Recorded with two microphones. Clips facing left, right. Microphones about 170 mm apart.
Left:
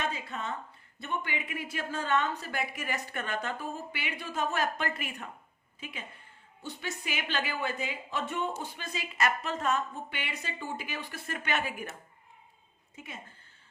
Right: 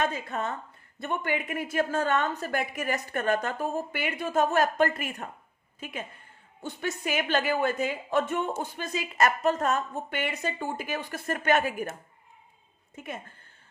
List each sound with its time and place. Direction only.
0.0 s a woman's voice: 50° right (ahead or behind)
13.0 s a woman's voice: 55° right (ahead or behind)